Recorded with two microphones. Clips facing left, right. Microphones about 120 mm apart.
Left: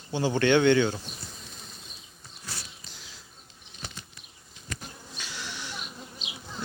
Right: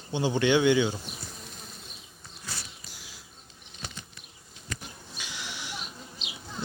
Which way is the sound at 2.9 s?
10° right (ahead or behind).